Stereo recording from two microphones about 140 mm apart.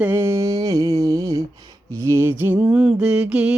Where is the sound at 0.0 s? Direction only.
15° right (ahead or behind).